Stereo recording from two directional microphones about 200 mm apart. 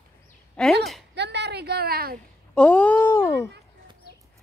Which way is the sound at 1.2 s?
55° right (ahead or behind).